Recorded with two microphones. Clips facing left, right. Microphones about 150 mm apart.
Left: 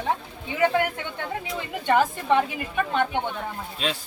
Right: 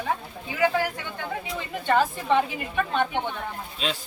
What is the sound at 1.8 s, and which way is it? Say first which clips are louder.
Speech: left 1 dB; 15° left (ahead or behind).